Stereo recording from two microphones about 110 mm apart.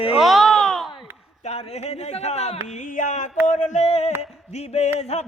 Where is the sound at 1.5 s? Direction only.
75° left (ahead or behind).